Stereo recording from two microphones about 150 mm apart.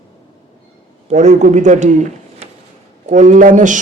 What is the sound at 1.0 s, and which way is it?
A man's voice, 50° right (ahead or behind).